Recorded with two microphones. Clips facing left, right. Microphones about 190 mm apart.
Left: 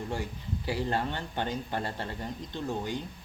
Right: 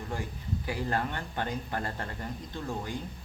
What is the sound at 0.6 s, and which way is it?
Speech, 30° left (ahead or behind).